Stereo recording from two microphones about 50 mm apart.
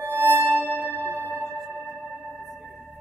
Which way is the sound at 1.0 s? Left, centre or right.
Left.